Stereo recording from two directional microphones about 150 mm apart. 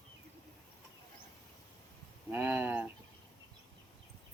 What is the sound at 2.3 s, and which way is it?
Speech, 10° right (ahead or behind).